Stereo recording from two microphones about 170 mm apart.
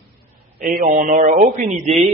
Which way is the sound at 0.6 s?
55° right (ahead or behind).